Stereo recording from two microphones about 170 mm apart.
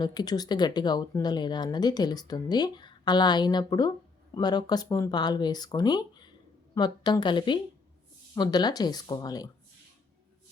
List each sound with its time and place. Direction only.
0.0 s speech: 25° left (ahead or behind)